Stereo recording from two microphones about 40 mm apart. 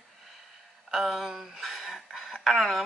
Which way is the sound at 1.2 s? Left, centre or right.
Centre.